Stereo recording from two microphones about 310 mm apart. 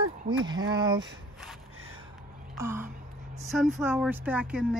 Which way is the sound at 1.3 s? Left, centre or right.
Centre.